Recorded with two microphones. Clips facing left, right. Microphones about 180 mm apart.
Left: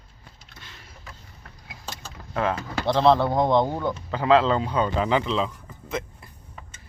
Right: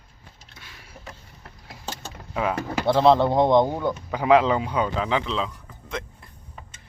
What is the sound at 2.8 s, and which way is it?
Speech, 10° right (ahead or behind).